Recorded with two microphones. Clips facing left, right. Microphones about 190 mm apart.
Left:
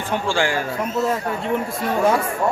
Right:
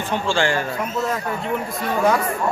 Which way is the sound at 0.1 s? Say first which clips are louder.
Even; 15° left (ahead or behind).